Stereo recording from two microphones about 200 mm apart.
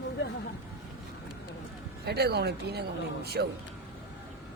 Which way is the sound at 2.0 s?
55° right (ahead or behind).